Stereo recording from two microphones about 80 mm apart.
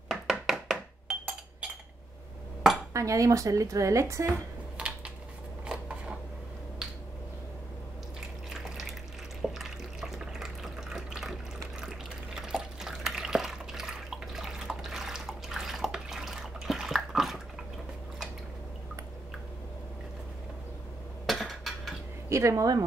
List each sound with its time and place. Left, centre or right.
0.1 s chink: centre
2.9 s speech: right
4.3 s a sound: centre
5.7 s scissors: centre
9.4 s water: centre
12.4 s drip: centre
21.3 s a sound: centre
22.3 s speech: right